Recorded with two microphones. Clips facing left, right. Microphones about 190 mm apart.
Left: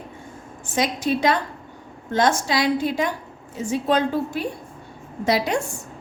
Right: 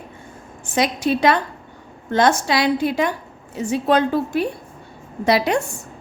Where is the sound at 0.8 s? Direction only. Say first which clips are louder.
Right 3 dB; 65° right (ahead or behind).